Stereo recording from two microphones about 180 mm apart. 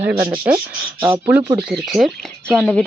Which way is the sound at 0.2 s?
10° right (ahead or behind).